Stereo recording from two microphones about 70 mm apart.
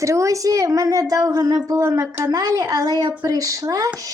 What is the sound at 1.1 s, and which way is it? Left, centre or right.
Speech, right.